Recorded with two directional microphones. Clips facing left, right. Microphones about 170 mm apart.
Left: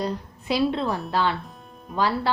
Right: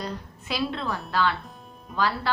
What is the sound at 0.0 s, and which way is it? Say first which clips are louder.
Speech: left 6 dB; 25° left (ahead or behind).